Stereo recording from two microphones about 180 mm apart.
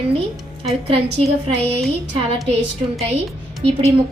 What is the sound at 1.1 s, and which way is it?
Speech, 35° right (ahead or behind).